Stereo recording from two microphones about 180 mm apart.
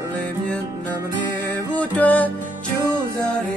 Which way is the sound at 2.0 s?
10° left (ahead or behind).